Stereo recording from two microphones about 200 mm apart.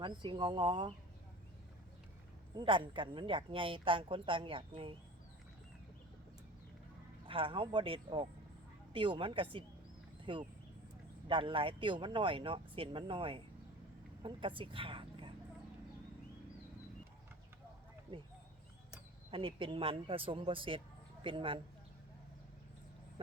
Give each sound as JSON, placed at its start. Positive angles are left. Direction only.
{"t": 0.0, "sound": "a woman's voice", "side_deg": -25}
{"t": 2.6, "sound": "a woman's voice", "side_deg": -25}
{"t": 7.3, "sound": "a woman's voice", "side_deg": -25}
{"t": 19.3, "sound": "a woman's voice", "side_deg": -25}